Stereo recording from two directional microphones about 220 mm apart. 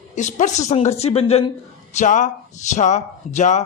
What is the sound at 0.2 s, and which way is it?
Speech, 35° left (ahead or behind).